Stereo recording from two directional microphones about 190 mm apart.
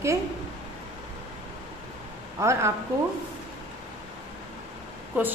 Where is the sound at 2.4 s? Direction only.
15° right (ahead or behind).